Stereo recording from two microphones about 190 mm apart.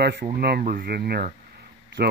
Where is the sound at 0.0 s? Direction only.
55° right (ahead or behind).